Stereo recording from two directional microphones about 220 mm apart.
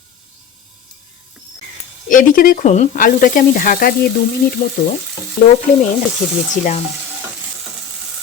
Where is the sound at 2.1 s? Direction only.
35° left (ahead or behind).